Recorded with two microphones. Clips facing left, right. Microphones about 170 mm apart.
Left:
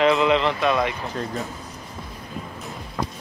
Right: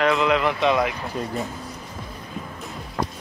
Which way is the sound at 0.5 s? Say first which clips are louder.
Right 1 dB; 15° right (ahead or behind).